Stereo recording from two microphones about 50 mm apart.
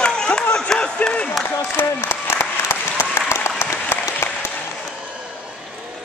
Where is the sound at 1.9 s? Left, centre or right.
Left.